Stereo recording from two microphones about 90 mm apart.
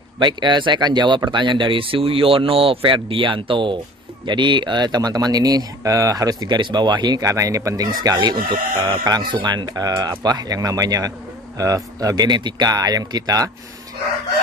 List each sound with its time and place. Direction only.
0.2 s speech: 55° right (ahead or behind)
7.2 s speech: 35° right (ahead or behind)